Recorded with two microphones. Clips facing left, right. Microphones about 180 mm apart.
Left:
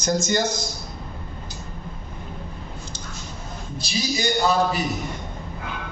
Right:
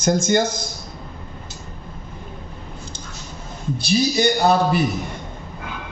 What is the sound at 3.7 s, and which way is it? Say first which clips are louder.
Speech: right 7 dB; 60° right (ahead or behind).